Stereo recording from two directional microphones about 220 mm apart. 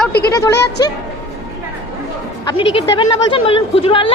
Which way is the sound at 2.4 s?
20° left (ahead or behind).